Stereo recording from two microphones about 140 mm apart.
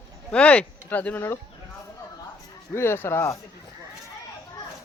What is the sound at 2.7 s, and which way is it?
Speech, 15° left (ahead or behind).